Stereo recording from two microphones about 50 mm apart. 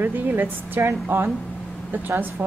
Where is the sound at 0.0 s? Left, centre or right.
Right.